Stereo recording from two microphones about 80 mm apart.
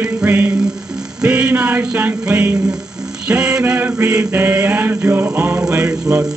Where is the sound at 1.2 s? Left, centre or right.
Centre.